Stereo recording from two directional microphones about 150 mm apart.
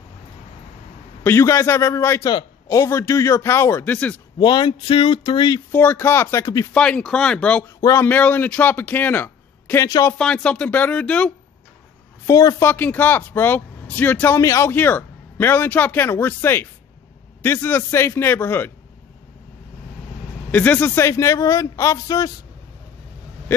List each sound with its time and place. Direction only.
1.2 s speech: 15° left (ahead or behind)
4.4 s speech: 30° left (ahead or behind)
5.7 s speech: 15° left (ahead or behind)
6.7 s speech: 5° left (ahead or behind)
7.6 s speech: 20° left (ahead or behind)
9.8 s speech: 25° left (ahead or behind)
10.1 s speech: 5° left (ahead or behind)
12.3 s speech: 20° left (ahead or behind)
20.5 s speech: 10° left (ahead or behind)